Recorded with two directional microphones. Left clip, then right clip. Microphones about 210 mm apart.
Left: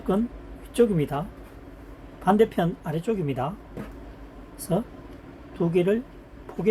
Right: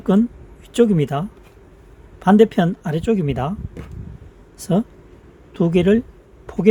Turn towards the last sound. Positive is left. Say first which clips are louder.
# right 7 dB
turn(degrees=-45)  # may be behind; listen again after turning